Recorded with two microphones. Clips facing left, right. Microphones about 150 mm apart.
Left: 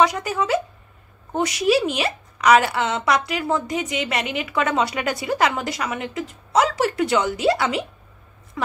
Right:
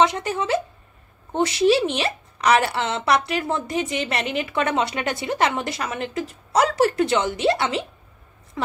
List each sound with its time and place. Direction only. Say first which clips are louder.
0.0 s a woman's voice: left 1 dB; 25° right (ahead or behind)